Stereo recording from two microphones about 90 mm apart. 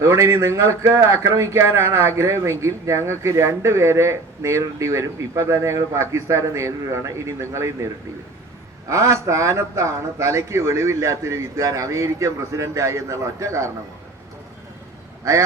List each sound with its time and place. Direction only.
0.0 s speech: 35° right (ahead or behind)
8.9 s speech: 35° right (ahead or behind)
15.2 s speech: 35° right (ahead or behind)